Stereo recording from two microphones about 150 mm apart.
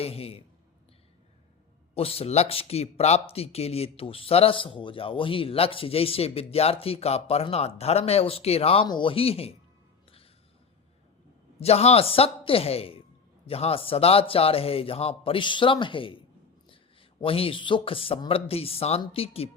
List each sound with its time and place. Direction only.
0.0 s speech: 40° left (ahead or behind)
2.0 s speech: 40° left (ahead or behind)
11.6 s a man's voice: 45° left (ahead or behind)